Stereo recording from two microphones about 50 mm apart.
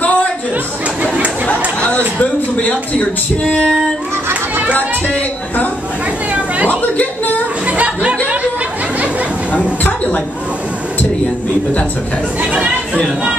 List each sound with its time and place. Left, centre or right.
0.0 s a sound: left
1.0 s chatter: right
1.5 s speech: left
3.4 s female singing: left
4.3 s children playing: right
7.6 s a sound: right
9.5 s speech: left